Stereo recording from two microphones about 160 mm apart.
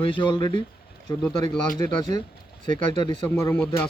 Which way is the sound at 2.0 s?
25° left (ahead or behind).